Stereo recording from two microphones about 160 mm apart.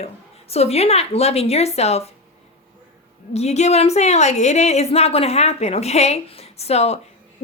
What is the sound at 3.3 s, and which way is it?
Speech, 45° left (ahead or behind).